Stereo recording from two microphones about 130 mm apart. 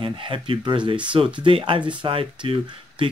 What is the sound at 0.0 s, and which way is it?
Speech, 40° right (ahead or behind).